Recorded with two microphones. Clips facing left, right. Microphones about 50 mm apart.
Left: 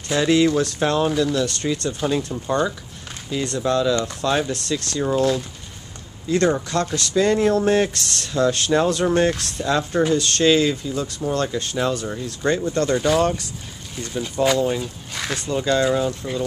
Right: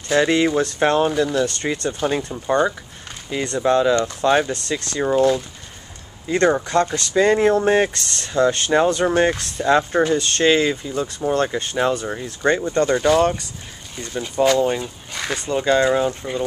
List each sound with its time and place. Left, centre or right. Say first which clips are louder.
0.1 s speech: right 1 dB; centre
2.0 s speech: right 1 dB; centre
3.3 s speech: right 3 dB; centre
9.7 s speech: right 3 dB; right
15.1 s speech: right 1 dB; centre
15.5 s speech: right 2 dB; centre